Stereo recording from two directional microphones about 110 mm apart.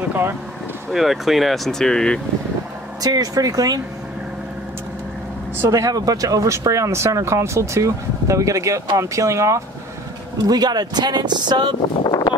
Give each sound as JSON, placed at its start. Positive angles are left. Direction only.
{"t": 0.1, "sound": "speech", "side_deg": -20}
{"t": 0.9, "sound": "speech", "side_deg": 0}
{"t": 3.0, "sound": "speech", "side_deg": -35}
{"t": 5.6, "sound": "speech", "side_deg": -30}
{"t": 12.0, "sound": "a sound", "side_deg": 40}